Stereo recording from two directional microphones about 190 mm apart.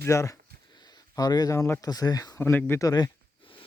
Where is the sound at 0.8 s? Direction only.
20° left (ahead or behind).